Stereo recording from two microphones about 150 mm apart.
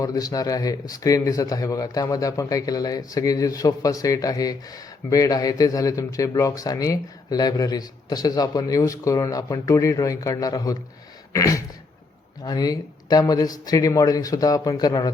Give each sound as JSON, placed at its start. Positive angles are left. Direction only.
{"t": 0.0, "sound": "speech", "side_deg": 25}